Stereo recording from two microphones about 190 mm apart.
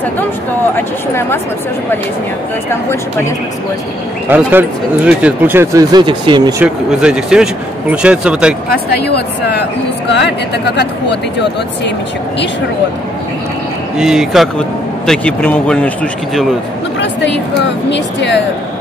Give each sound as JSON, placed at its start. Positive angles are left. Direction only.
{"t": 0.7, "sound": "speech", "side_deg": 15}
{"t": 4.3, "sound": "speech", "side_deg": -10}
{"t": 6.6, "sound": "speech", "side_deg": -5}
{"t": 8.6, "sound": "speech", "side_deg": 55}
{"t": 13.9, "sound": "speech", "side_deg": -5}
{"t": 17.0, "sound": "speech", "side_deg": 65}